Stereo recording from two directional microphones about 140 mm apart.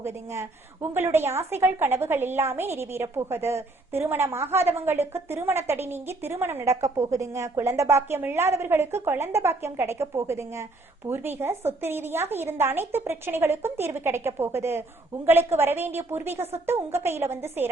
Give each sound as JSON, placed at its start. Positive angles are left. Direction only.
{"t": 0.0, "sound": "a woman's voice", "side_deg": -20}